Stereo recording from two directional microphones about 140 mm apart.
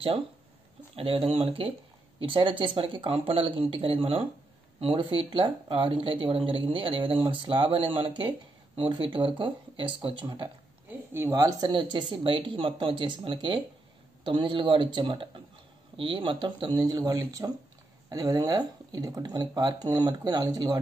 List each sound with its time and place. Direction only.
0.9 s speech: 40° right (ahead or behind)